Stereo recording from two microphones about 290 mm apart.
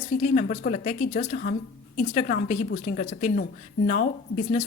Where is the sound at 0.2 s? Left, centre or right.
Left.